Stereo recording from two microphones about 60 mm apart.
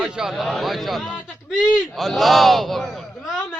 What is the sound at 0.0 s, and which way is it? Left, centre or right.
Speech, centre.